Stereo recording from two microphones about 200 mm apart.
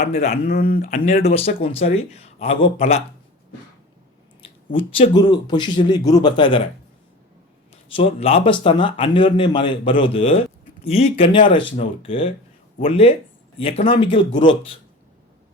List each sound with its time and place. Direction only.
0.0 s speech: 35° left (ahead or behind)
4.4 s a man's voice: 25° left (ahead or behind)
7.9 s a man's voice: 30° left (ahead or behind)